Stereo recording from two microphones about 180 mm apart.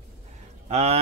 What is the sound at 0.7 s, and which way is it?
Speech, 35° right (ahead or behind).